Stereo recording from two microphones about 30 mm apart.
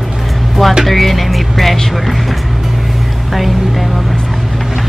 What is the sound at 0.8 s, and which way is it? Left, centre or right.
Speech, centre.